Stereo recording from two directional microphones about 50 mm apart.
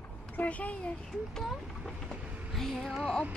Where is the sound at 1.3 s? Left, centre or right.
Centre.